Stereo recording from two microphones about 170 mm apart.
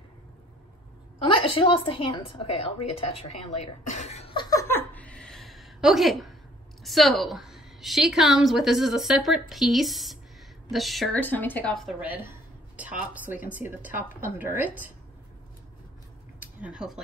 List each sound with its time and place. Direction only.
1.2 s a woman's voice: 30° left (ahead or behind)
3.9 s laughter: 40° left (ahead or behind); by 6.3 s centre (ahead or behind)
6.8 s a woman's voice: centre (ahead or behind)
11.2 s speech: 10° left (ahead or behind)
12.0 s speech: 10° right (ahead or behind)
16.3 s a sound: 5° right (ahead or behind)